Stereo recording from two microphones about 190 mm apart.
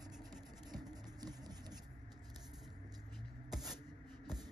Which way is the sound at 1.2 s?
20° right (ahead or behind).